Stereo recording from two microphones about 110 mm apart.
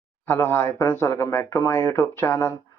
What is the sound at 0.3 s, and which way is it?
Speech, 20° left (ahead or behind).